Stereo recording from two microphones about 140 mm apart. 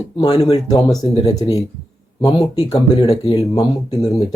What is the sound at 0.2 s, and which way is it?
Speech, 25° left (ahead or behind).